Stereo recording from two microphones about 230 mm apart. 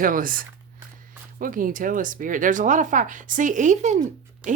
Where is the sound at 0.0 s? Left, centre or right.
Right.